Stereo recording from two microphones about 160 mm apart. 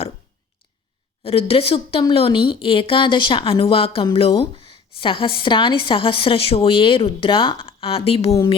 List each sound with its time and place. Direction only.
1.2 s a woman's voice: 40° left (ahead or behind)